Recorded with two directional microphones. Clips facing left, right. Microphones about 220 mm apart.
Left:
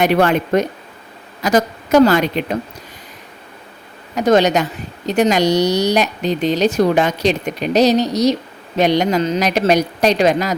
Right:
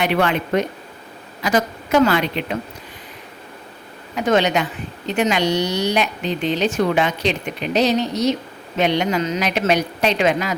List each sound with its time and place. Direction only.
0.0 s a woman's voice: 45° left (ahead or behind)
4.1 s a woman's voice: 40° left (ahead or behind)